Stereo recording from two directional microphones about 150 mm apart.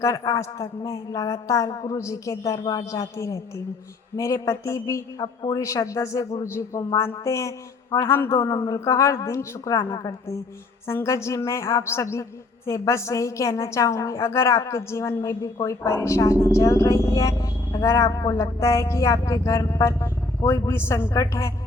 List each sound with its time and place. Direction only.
0.0 s speech: 20° left (ahead or behind)